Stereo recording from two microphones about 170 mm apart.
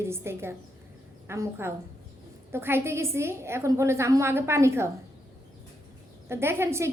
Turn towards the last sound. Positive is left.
turn(degrees=-15)  # may be behind; listen again after turning